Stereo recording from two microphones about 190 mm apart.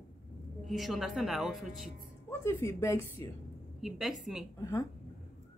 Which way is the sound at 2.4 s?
15° left (ahead or behind).